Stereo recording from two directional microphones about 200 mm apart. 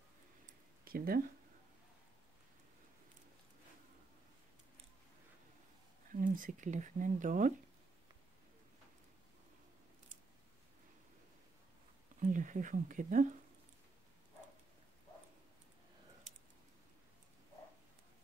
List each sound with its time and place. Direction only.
0.5 s a sound: 50° right (ahead or behind)
6.1 s speech: 40° right (ahead or behind)
12.2 s speech: 40° right (ahead or behind)